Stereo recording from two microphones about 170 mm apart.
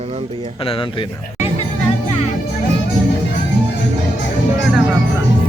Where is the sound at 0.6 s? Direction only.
30° left (ahead or behind).